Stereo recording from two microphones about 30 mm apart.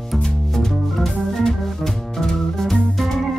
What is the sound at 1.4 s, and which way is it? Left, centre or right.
Organ, centre.